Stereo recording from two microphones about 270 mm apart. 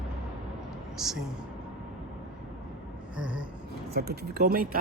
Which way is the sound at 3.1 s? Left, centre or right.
Centre.